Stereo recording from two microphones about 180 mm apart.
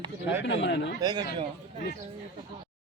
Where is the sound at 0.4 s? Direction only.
80° left.